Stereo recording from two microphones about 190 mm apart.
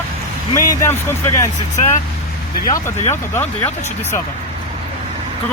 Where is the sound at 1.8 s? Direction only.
40° left (ahead or behind).